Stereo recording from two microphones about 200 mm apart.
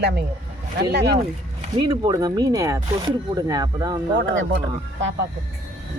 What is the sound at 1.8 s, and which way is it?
Speech, 20° right (ahead or behind).